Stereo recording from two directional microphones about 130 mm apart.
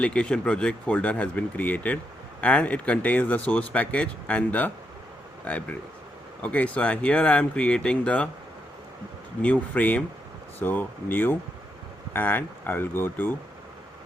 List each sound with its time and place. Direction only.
0.0 s speech: 10° left (ahead or behind)
9.4 s speech: 10° left (ahead or behind)